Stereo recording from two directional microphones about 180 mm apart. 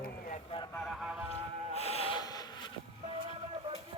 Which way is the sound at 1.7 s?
35° left (ahead or behind).